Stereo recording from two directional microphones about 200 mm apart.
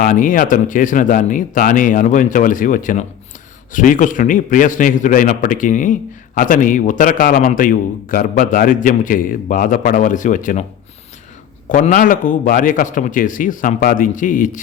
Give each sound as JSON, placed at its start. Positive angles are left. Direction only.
{"t": 0.0, "sound": "a man's voice", "side_deg": 45}
{"t": 11.7, "sound": "a man's voice", "side_deg": 40}